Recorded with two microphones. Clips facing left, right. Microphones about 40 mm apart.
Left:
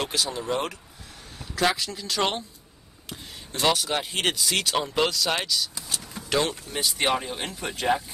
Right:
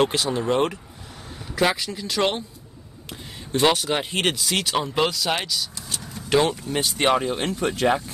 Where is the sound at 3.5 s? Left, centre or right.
Centre.